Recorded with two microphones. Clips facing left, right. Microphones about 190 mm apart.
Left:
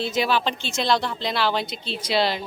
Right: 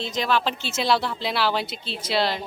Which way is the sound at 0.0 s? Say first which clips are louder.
Left 1 dB; 5° left (ahead or behind).